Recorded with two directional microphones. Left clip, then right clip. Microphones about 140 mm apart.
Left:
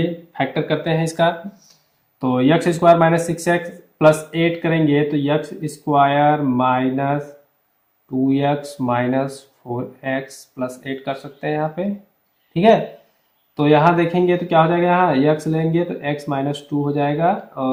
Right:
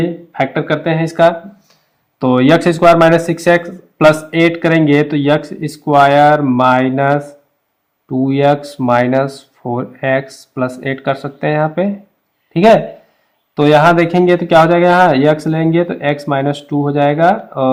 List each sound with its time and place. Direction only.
0.0 s speech: 35° right (ahead or behind)
2.1 s speech: 50° right (ahead or behind)
8.2 s speech: 45° right (ahead or behind)
13.6 s speech: 50° right (ahead or behind)